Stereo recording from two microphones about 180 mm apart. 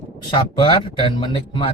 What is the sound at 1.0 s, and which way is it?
Speech, 25° left (ahead or behind).